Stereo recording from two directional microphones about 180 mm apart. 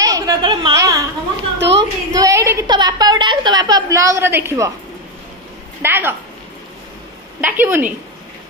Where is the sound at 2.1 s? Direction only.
20° right (ahead or behind).